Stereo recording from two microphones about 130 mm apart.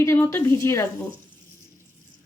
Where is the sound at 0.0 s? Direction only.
20° left (ahead or behind).